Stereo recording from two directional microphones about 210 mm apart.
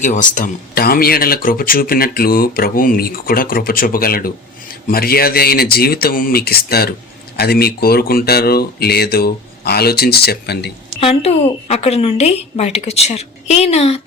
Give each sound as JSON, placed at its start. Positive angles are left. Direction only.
{"t": 0.0, "sound": "speech", "side_deg": 35}
{"t": 11.0, "sound": "a woman's voice", "side_deg": 30}